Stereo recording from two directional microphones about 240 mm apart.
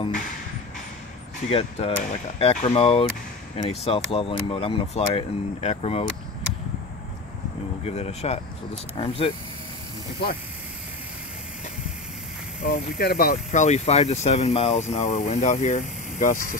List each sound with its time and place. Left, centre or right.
1.5 s speech: left
7.8 s speech: left
12.6 s speech: left